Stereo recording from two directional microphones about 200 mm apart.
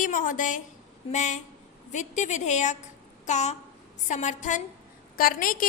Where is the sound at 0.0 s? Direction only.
40° left (ahead or behind).